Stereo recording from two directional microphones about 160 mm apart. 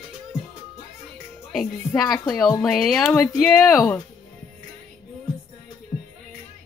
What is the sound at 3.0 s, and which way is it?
Speech, 15° left (ahead or behind).